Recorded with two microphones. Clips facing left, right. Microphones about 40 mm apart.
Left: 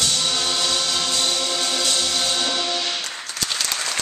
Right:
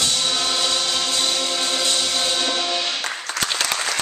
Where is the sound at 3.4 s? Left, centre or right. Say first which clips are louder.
Right 2 dB; right.